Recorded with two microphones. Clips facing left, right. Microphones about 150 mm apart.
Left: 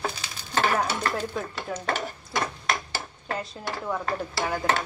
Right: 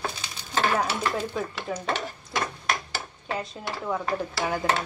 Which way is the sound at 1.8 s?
Centre (ahead or behind).